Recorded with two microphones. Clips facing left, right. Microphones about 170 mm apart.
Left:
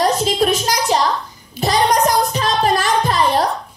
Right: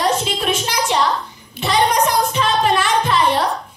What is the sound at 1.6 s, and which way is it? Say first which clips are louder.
Music: left 1 dB; 40° left (ahead or behind).